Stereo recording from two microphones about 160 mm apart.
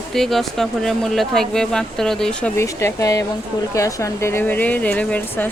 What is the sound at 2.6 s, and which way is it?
Speech, 15° left (ahead or behind).